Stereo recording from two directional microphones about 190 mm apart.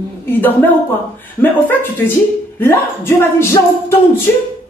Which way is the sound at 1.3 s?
10° left (ahead or behind).